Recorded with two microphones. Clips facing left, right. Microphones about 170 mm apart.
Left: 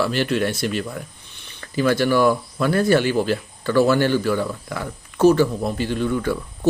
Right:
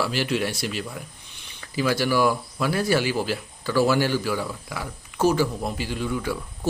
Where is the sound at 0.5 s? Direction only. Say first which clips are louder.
Left 5 dB; 55° left (ahead or behind).